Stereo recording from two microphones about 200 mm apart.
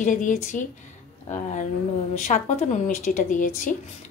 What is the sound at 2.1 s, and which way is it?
A woman's voice, 40° left (ahead or behind).